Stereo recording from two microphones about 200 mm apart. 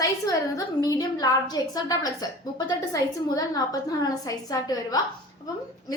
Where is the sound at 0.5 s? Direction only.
20° left (ahead or behind).